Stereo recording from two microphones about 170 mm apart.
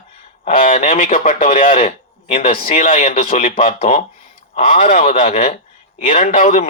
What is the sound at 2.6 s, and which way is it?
Speech, 50° left (ahead or behind).